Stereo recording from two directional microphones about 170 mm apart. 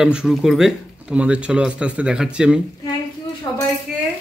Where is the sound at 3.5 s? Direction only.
25° left (ahead or behind).